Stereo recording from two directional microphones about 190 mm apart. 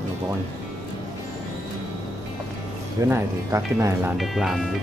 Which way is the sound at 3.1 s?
15° right (ahead or behind).